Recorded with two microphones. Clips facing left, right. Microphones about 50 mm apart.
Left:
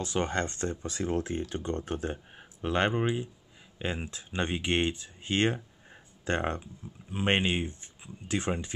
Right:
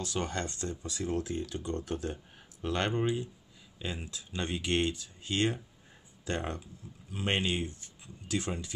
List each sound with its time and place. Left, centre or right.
0.0 s speech: left